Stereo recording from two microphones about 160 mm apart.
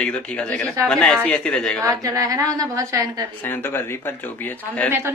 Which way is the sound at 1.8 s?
20° right (ahead or behind).